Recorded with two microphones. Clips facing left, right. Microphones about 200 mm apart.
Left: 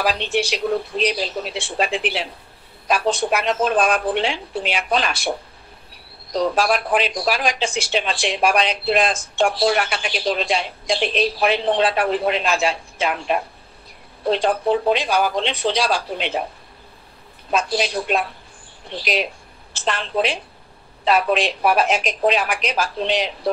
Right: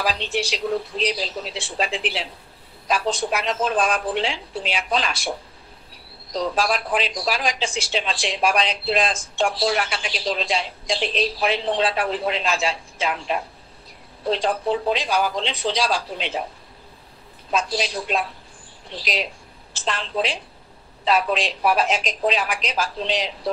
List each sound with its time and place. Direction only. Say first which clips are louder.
0.0 s speech: left 4 dB; 60° left (ahead or behind)
6.3 s speech: left 4 dB; 60° left (ahead or behind)
17.5 s speech: left 3 dB; 60° left (ahead or behind)